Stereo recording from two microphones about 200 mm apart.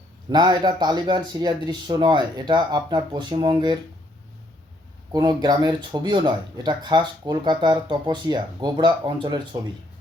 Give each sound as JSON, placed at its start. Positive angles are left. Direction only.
{"t": 0.3, "sound": "speech", "side_deg": -20}
{"t": 5.1, "sound": "speech", "side_deg": -20}